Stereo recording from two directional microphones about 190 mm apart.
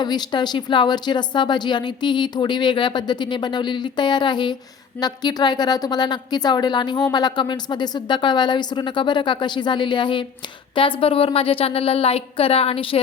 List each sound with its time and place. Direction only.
0.0 s a woman's voice: 20° left (ahead or behind)